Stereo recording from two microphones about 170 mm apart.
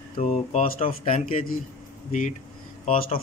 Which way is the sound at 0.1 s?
40° left (ahead or behind).